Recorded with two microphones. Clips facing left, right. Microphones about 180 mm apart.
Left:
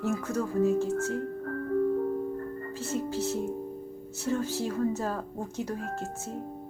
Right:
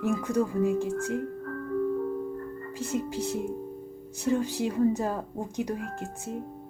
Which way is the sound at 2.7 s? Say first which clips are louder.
Right 1 dB; 15° right (ahead or behind).